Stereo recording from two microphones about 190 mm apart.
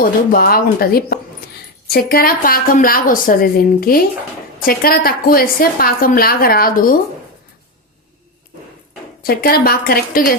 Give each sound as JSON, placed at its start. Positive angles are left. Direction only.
{"t": 0.0, "sound": "a woman's voice", "side_deg": 50}
{"t": 9.2, "sound": "a woman's voice", "side_deg": 50}